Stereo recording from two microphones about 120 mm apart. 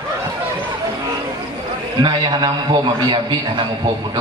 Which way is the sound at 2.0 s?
40° right (ahead or behind).